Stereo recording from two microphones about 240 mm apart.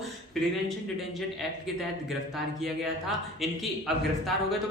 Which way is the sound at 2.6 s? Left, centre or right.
Centre.